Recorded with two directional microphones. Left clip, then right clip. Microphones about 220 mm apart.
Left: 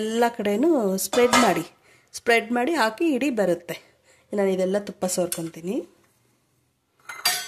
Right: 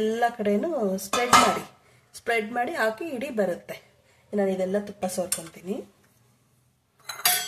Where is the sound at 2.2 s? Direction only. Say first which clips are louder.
Left 5 dB; 45° left (ahead or behind).